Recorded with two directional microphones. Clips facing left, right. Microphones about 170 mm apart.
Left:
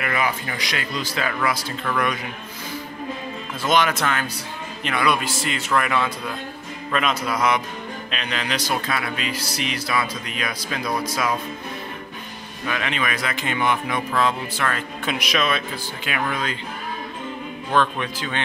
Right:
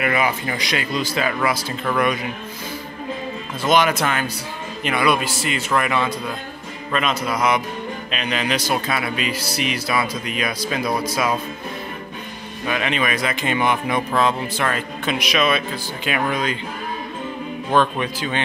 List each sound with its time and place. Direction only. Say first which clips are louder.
0.0 s speech: right 4 dB; 15° right (ahead or behind)
3.6 s speech: right 3 dB; 5° right (ahead or behind)
7.3 s speech: right 2 dB; 15° right (ahead or behind)
12.6 s speech: right 4 dB; 20° right (ahead or behind)
15.0 s speech: right 3 dB; centre (ahead or behind)
16.1 s speech: right 4 dB; 20° right (ahead or behind)
17.7 s speech: right 2 dB; 15° right (ahead or behind)